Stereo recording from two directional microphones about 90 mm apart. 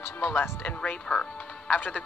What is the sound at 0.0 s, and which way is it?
Speech, 20° left (ahead or behind).